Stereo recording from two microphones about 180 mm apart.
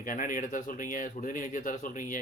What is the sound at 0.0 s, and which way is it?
Speech, 50° left (ahead or behind).